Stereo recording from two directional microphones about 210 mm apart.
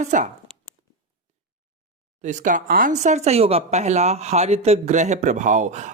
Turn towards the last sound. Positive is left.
turn(degrees=-35)  # may be behind; listen again after turning